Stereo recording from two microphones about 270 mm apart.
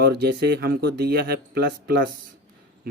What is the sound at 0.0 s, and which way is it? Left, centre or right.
Speech, right.